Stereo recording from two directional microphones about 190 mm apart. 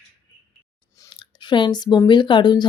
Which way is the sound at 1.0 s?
25° left (ahead or behind).